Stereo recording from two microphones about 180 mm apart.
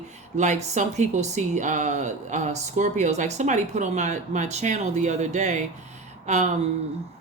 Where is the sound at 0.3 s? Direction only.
40° right (ahead or behind).